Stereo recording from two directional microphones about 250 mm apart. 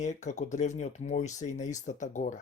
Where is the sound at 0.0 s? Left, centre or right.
Left.